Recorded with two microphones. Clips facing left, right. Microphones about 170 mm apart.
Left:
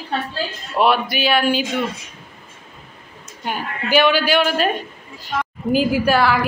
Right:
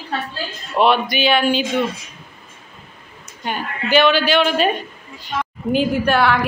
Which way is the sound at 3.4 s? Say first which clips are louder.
Right 1 dB; 10° left (ahead or behind).